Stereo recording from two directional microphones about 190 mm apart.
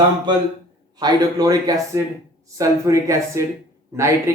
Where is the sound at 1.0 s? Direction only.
20° right (ahead or behind).